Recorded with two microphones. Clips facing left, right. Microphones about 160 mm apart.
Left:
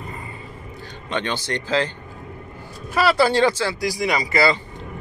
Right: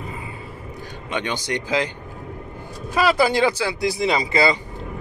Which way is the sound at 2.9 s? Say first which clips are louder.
Even; 15° right (ahead or behind).